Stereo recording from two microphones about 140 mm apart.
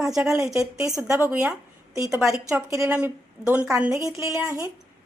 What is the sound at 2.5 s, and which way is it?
A woman's voice, 10° right (ahead or behind).